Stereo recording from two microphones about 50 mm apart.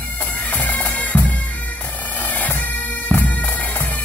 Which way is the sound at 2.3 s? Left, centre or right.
Left.